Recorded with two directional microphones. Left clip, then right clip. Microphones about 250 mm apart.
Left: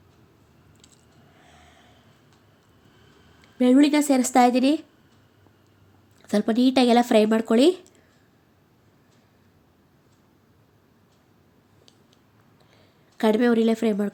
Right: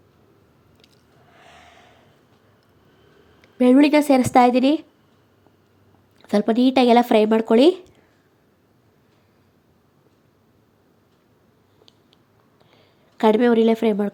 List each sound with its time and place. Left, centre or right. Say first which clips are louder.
1.4 s gasp: right 7 dB; centre
3.4 s speech: right 3 dB; centre
6.2 s speech: right 3 dB; centre
12.7 s a sound: right 2 dB; centre